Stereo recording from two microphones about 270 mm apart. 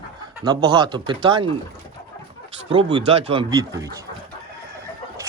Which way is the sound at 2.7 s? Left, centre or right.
Centre.